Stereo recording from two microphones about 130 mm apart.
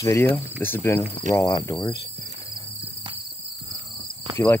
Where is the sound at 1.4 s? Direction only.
40° left (ahead or behind).